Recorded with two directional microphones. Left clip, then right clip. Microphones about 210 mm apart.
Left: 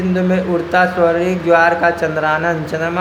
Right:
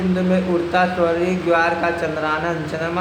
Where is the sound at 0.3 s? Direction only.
30° left (ahead or behind).